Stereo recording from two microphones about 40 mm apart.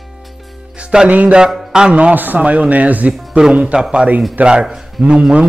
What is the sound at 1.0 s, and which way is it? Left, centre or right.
Speech, right.